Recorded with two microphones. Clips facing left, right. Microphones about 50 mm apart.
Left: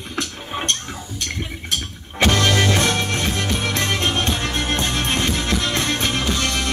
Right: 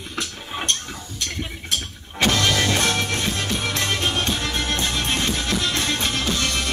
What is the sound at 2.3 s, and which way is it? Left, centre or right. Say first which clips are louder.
Music: left 3 dB; left.